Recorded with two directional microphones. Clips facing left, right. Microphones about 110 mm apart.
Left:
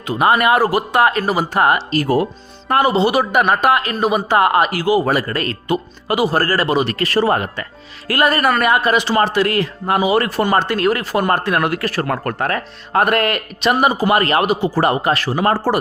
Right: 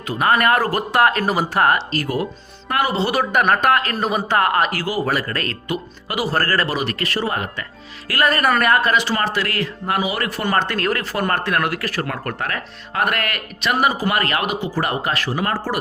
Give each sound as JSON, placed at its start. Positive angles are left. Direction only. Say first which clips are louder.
{"t": 0.1, "sound": "speech", "louder": "left 3 dB", "side_deg": 20}
{"t": 0.3, "sound": "a man's voice", "louder": "left 3 dB", "side_deg": 10}
{"t": 2.6, "sound": "speech", "louder": "left 6 dB", "side_deg": 30}
{"t": 2.9, "sound": "a man's voice", "louder": "left 4 dB", "side_deg": 15}
{"t": 5.3, "sound": "a man's voice", "louder": "left 4 dB", "side_deg": 10}
{"t": 5.6, "sound": "speech", "louder": "left 6 dB", "side_deg": 30}
{"t": 6.2, "sound": "a man's voice", "louder": "left 2 dB", "side_deg": 15}
{"t": 6.7, "sound": "speech", "louder": "left 6 dB", "side_deg": 30}
{"t": 7.1, "sound": "speech", "louder": "left 7 dB", "side_deg": 45}
{"t": 8.0, "sound": "speech", "louder": "left 3 dB", "side_deg": 25}
{"t": 8.3, "sound": "speech", "louder": "even", "side_deg": 5}
{"t": 10.4, "sound": "speech", "louder": "left 4 dB", "side_deg": 15}